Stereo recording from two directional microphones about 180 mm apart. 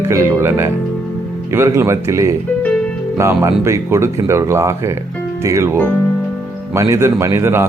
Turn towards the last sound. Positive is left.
turn(degrees=-15)  # may be behind; listen again after turning